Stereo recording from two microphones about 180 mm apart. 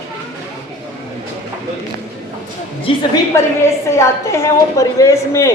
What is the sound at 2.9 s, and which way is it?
Speech, 30° left (ahead or behind).